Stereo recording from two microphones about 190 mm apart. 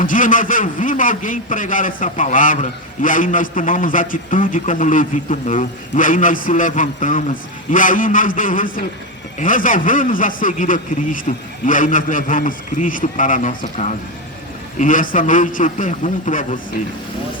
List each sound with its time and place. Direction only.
0.0 s a man's voice: 45° left (ahead or behind)